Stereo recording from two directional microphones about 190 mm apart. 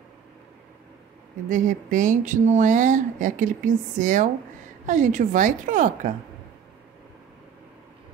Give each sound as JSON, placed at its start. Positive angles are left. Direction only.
{"t": 1.5, "sound": "speech", "side_deg": -45}